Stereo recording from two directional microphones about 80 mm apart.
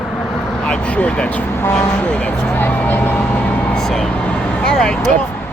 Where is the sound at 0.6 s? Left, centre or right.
Centre.